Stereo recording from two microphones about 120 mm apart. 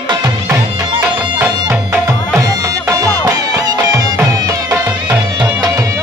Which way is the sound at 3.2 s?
30° right (ahead or behind).